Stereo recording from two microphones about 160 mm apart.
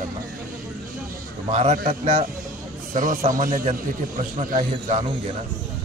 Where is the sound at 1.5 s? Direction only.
50° right (ahead or behind).